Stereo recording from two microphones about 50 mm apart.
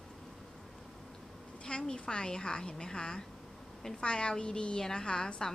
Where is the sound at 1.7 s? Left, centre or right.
Centre.